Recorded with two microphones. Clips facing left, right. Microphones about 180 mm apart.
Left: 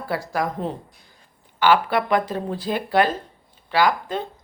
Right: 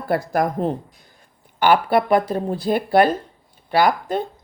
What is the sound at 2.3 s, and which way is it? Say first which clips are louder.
Speech: right 4 dB; 45° right (ahead or behind).